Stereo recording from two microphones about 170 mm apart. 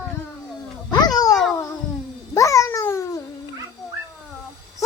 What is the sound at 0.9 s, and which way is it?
Music, 25° left (ahead or behind).